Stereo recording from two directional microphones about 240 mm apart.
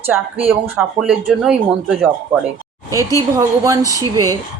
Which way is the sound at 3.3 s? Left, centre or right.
Centre.